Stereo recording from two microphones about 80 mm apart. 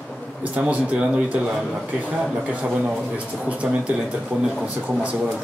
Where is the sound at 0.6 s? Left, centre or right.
Centre.